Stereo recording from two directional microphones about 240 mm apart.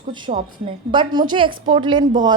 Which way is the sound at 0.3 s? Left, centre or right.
Right.